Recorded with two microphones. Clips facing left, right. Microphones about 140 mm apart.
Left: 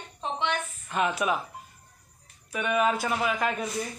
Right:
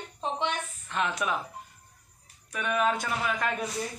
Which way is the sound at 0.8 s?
10° left (ahead or behind).